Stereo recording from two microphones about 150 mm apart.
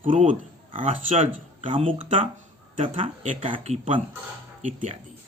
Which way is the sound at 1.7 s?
35° right (ahead or behind).